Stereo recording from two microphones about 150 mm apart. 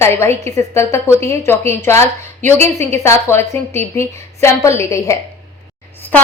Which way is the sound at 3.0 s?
15° left (ahead or behind).